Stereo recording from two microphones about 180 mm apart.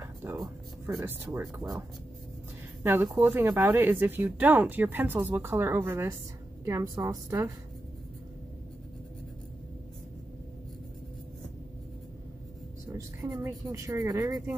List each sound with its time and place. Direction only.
0.0 s speech: 15° right (ahead or behind)
2.8 s speech: 10° right (ahead or behind)
12.9 s speech: 15° right (ahead or behind)